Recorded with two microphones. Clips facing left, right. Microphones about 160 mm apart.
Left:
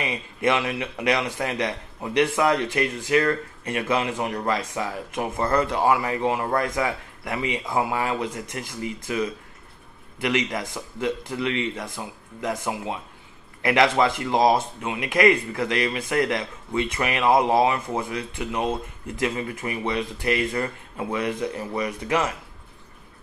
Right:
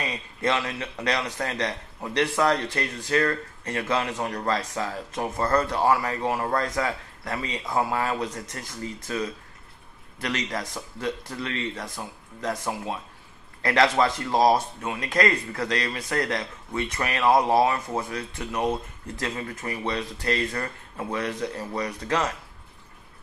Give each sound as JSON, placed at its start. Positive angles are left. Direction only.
{"t": 0.0, "sound": "speech", "side_deg": 15}